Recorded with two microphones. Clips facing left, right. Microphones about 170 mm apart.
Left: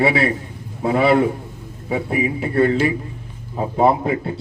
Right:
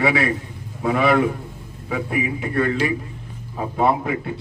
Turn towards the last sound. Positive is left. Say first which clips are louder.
# left 3 dB
turn(degrees=35)  # may be behind; listen again after turning